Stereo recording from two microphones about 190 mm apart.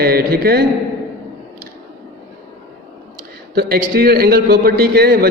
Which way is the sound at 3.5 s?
50° right (ahead or behind).